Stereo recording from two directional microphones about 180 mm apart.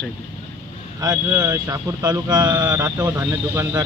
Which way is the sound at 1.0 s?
20° right (ahead or behind).